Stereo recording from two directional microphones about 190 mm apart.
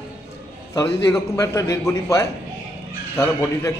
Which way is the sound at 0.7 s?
15° left (ahead or behind).